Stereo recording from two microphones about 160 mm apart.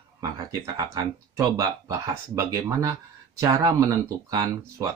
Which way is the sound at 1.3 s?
25° right (ahead or behind).